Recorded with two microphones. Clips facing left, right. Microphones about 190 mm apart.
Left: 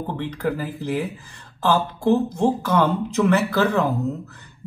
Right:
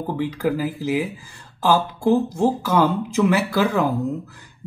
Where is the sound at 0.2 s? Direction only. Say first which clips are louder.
Right 4 dB; 10° right (ahead or behind).